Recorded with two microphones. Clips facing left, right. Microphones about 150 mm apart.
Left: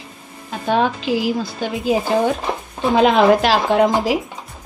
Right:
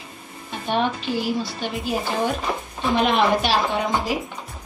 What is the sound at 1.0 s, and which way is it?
Speech, 90° left.